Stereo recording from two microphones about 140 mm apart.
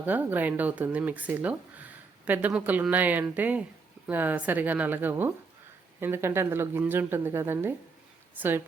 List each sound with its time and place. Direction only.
0.0 s speech: 15° right (ahead or behind)